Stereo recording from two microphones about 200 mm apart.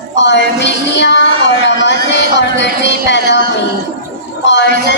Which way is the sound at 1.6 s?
60° left (ahead or behind).